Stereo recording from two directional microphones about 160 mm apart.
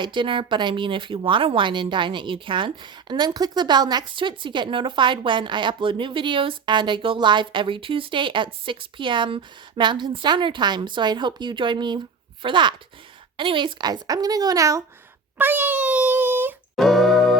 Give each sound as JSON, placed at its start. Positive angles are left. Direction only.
{"t": 0.0, "sound": "a woman's voice", "side_deg": -30}
{"t": 15.4, "sound": "wail", "side_deg": -10}
{"t": 16.7, "sound": "music", "side_deg": 0}